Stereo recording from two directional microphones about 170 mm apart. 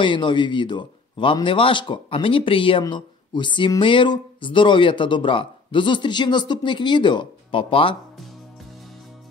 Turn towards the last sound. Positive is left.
turn(degrees=30)  # may be behind; listen again after turning